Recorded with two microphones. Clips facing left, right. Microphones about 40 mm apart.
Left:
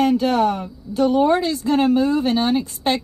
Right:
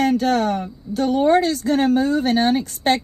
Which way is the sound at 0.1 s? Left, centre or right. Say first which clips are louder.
Left 1 dB; right.